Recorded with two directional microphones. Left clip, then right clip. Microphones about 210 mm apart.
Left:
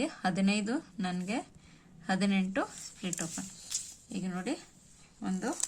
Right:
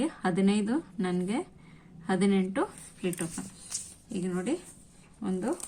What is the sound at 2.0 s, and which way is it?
Speech, 50° left (ahead or behind).